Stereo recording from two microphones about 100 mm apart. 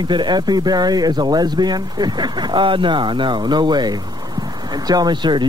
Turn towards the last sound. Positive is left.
turn(degrees=-50)  # may be behind; listen again after turning